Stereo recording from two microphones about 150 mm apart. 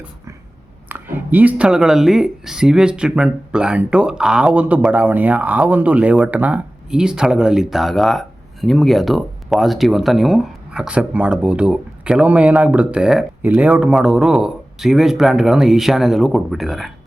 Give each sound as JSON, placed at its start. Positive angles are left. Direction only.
{"t": 0.9, "sound": "speech", "side_deg": -15}